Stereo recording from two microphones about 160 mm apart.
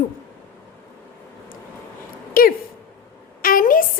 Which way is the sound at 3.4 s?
60° left (ahead or behind).